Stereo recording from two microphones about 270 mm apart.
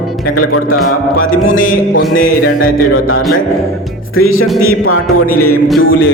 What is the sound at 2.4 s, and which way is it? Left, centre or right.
Music, left.